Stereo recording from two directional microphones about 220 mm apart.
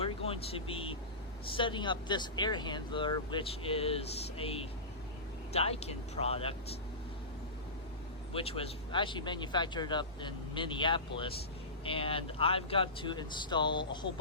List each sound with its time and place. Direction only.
0.0 s speech: 25° left (ahead or behind)
8.3 s speech: 25° left (ahead or behind)